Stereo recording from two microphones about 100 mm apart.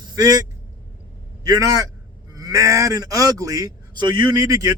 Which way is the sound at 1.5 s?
35° right (ahead or behind).